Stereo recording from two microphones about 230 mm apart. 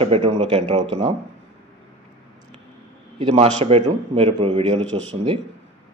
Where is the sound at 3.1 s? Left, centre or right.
Right.